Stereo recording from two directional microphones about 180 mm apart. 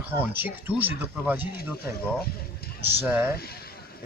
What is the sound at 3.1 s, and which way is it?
Speech, 15° right (ahead or behind).